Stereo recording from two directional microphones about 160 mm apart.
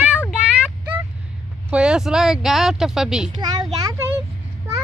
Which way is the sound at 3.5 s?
25° right (ahead or behind).